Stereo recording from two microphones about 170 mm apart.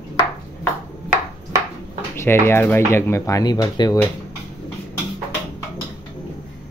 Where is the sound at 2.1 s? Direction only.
15° left (ahead or behind).